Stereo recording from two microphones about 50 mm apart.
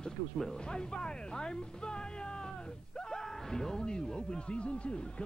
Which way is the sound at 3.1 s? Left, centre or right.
Centre.